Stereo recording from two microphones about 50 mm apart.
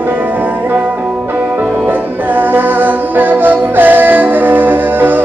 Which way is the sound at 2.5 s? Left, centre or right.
Right.